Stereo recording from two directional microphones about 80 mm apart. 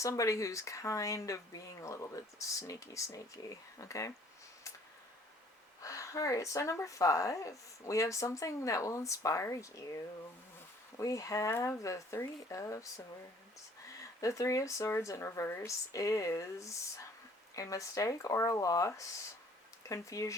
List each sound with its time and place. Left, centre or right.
0.0 s speech: left
5.8 s speech: left
14.2 s speech: left
19.9 s speech: left